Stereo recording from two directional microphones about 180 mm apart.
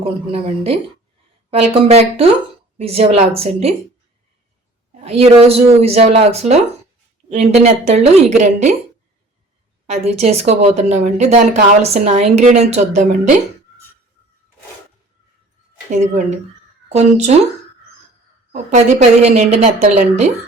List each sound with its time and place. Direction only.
0.0 s speech: 30° right (ahead or behind)
4.9 s speech: 35° right (ahead or behind)
9.8 s speech: 35° right (ahead or behind)
15.9 s speech: 40° right (ahead or behind)
18.5 s speech: 40° right (ahead or behind)